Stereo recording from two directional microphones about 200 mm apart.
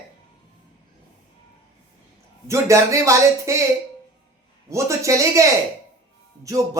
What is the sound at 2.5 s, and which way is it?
Speech, 15° right (ahead or behind).